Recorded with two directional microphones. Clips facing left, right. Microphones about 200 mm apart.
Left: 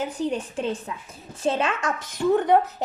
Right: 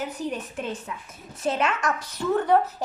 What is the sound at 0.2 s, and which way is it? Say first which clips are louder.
A woman's voice: left 4 dB; 30° left (ahead or behind).